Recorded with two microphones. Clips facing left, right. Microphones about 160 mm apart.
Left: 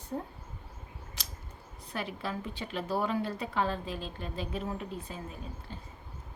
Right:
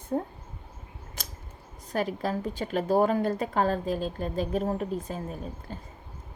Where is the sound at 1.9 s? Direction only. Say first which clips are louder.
Right 8 dB; 40° right (ahead or behind).